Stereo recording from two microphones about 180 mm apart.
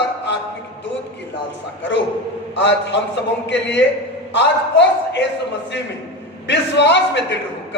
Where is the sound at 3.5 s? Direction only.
75° left (ahead or behind).